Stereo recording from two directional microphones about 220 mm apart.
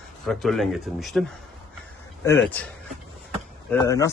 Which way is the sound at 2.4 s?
5° left (ahead or behind).